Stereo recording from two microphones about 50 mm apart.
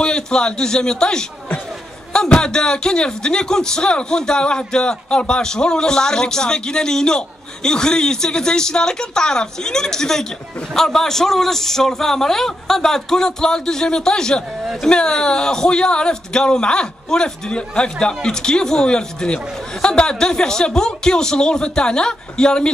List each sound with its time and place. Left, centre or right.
0.0 s a man's voice: centre